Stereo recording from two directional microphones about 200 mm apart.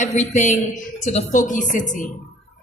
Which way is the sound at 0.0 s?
35° left (ahead or behind).